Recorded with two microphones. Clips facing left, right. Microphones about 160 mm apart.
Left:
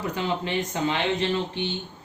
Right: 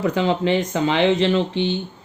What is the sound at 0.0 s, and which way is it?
Speech, 90° right.